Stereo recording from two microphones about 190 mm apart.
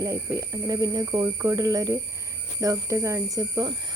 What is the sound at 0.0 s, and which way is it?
Speech, 15° right (ahead or behind).